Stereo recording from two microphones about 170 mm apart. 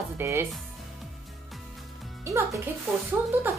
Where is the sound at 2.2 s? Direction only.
15° right (ahead or behind).